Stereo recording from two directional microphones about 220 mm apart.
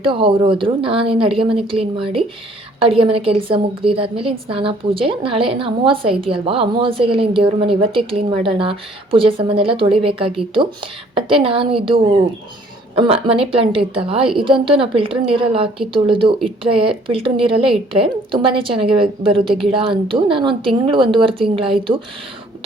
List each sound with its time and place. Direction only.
0.0 s a woman's voice: 25° right (ahead or behind)